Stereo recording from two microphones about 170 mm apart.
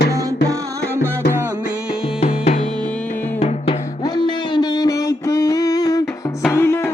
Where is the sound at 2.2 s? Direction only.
40° left (ahead or behind).